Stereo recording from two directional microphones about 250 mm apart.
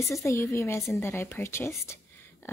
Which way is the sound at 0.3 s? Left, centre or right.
Centre.